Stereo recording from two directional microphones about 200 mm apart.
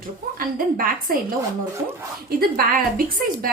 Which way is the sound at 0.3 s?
45° right (ahead or behind).